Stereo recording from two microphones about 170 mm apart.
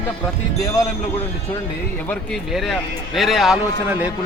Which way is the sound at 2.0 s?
5° left (ahead or behind).